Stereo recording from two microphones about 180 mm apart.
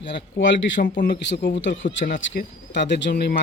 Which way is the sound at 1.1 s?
75° left (ahead or behind).